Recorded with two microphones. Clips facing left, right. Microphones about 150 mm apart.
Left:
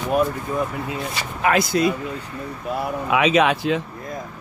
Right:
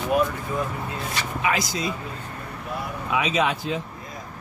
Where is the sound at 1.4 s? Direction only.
55° left (ahead or behind).